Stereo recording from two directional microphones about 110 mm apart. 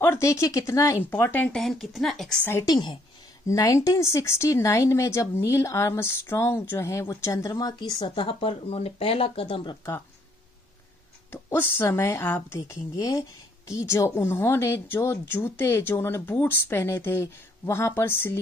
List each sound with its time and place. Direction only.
0.0 s speech: 25° left (ahead or behind)
1.6 s speech: centre (ahead or behind)
2.6 s speech: 40° left (ahead or behind)
3.4 s speech: 30° left (ahead or behind); by 9.8 s 55° left (ahead or behind)
11.3 s speech: 20° left (ahead or behind)
12.5 s speech: 30° left (ahead or behind)